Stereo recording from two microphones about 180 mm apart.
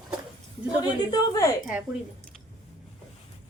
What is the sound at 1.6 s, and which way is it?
Speech, 10° right (ahead or behind).